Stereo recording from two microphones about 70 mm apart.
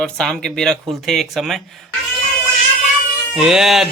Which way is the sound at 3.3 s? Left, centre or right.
Centre.